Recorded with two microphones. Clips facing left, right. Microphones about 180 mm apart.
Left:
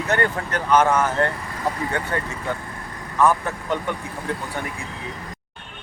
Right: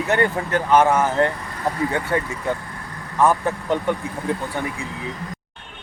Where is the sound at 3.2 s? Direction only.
15° right (ahead or behind).